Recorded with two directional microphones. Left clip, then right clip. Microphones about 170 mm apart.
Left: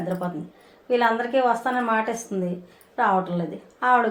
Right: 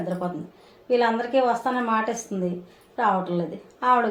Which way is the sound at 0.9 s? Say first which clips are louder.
Left 1 dB; 40° left (ahead or behind).